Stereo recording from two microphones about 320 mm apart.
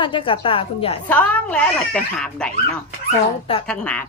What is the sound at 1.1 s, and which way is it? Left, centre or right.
Speech, centre.